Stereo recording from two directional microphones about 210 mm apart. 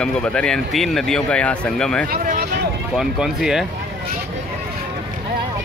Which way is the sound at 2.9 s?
Centre (ahead or behind).